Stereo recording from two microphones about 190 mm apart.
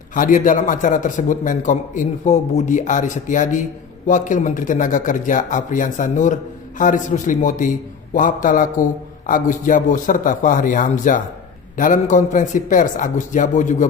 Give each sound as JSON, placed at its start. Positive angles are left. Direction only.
{"t": 0.1, "sound": "a man's voice", "side_deg": 45}